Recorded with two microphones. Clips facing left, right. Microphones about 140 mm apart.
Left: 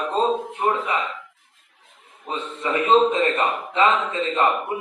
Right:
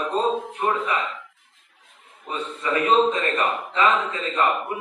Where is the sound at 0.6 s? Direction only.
20° left (ahead or behind).